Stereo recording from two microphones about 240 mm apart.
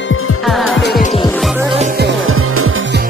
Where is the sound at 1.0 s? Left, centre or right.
Left.